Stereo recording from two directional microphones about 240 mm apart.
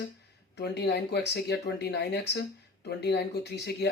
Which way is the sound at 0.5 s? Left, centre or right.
Left.